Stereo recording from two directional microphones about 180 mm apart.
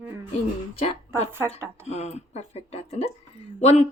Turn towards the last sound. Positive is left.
turn(degrees=35)  # may be behind; listen again after turning